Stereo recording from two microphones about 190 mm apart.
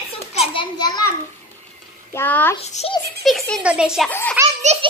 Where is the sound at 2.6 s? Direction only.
35° left (ahead or behind).